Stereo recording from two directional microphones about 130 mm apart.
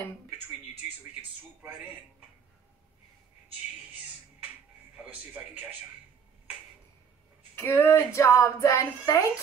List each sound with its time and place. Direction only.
1.6 s speech: 10° right (ahead or behind)
4.9 s speech: 15° right (ahead or behind)
7.5 s a woman's voice: 20° left (ahead or behind)